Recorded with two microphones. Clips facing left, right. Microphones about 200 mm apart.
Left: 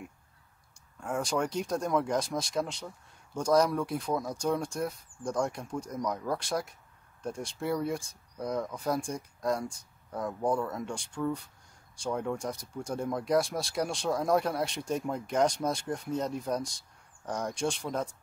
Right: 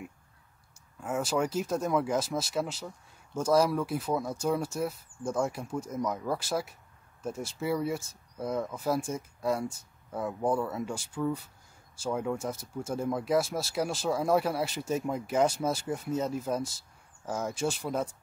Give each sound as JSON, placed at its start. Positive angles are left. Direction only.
{"t": 1.0, "sound": "speech", "side_deg": -5}